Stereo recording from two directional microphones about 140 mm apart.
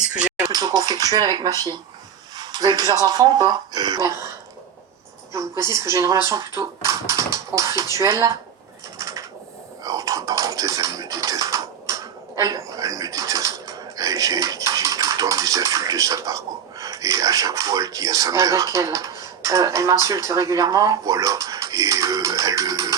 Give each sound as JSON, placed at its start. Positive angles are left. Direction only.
{"t": 0.1, "sound": "a sound", "side_deg": -10}
{"t": 0.5, "sound": "speech", "side_deg": -25}
{"t": 5.3, "sound": "speech", "side_deg": -20}
{"t": 9.0, "sound": "a sound", "side_deg": -25}
{"t": 9.8, "sound": "dishes", "side_deg": -25}
{"t": 14.4, "sound": "speech", "side_deg": -25}